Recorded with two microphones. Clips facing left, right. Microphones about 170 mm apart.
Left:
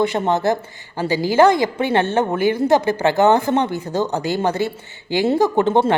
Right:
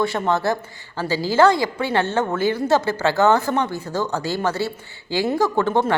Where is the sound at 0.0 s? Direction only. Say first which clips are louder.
Left 3 dB; 20° left (ahead or behind).